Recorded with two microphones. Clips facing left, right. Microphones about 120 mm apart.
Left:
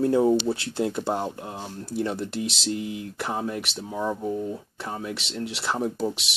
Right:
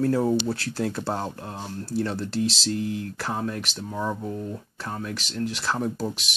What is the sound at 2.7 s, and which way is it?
Speech, 10° left (ahead or behind).